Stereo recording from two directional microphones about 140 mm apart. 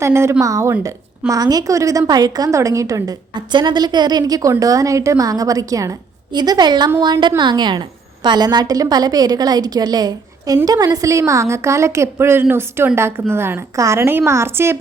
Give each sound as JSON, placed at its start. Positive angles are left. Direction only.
{"t": 0.0, "sound": "a woman's voice", "side_deg": -20}